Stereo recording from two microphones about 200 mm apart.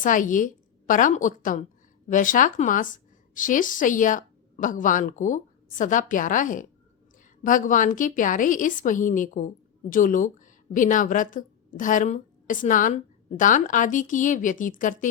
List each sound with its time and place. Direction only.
0.0 s a woman's voice: 40° left (ahead or behind)